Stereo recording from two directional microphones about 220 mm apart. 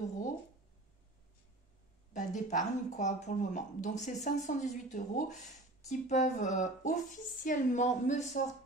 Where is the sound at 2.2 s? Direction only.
35° left (ahead or behind).